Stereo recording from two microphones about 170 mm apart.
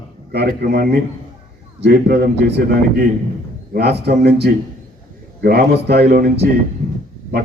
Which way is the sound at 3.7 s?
75° right (ahead or behind).